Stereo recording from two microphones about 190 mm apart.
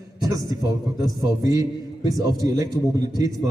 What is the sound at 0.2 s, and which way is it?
A man's voice, 20° right (ahead or behind).